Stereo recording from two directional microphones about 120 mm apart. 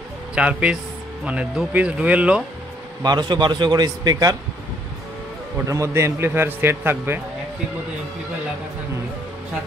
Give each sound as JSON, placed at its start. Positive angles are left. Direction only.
{"t": 0.3, "sound": "speech", "side_deg": -10}
{"t": 3.0, "sound": "a man's voice", "side_deg": -35}
{"t": 5.7, "sound": "a man's voice", "side_deg": -25}